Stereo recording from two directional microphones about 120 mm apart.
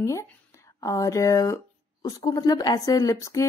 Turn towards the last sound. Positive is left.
turn(degrees=25)  # may be behind; listen again after turning